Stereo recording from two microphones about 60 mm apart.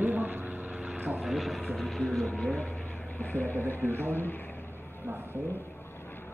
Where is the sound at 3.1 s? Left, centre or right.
Left.